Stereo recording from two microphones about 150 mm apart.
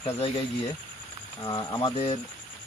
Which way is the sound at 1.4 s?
30° left (ahead or behind).